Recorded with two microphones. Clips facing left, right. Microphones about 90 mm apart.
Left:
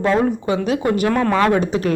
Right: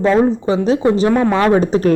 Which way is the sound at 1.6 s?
35° right (ahead or behind).